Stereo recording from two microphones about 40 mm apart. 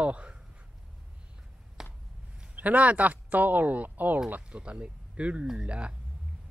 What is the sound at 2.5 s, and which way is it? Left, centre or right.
Speech, right.